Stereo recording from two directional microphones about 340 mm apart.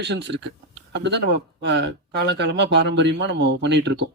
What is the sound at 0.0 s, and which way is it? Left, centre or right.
Speech, right.